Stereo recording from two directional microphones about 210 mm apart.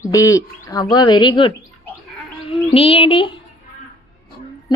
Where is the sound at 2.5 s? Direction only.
25° left (ahead or behind).